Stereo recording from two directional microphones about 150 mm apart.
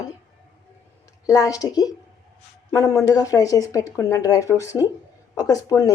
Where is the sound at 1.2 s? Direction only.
20° left (ahead or behind).